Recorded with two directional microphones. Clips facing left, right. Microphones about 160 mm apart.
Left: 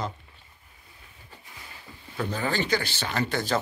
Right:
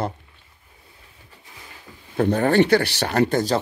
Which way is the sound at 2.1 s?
55° right (ahead or behind).